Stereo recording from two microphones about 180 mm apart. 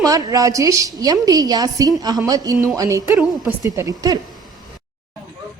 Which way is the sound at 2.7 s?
15° right (ahead or behind).